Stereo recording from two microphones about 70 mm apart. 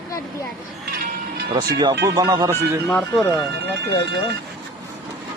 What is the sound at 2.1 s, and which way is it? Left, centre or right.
Speech, right.